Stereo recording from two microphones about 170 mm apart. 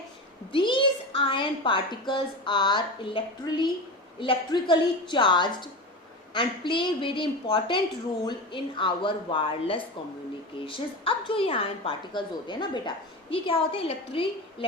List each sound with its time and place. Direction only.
0.5 s a woman's voice: 30° left (ahead or behind)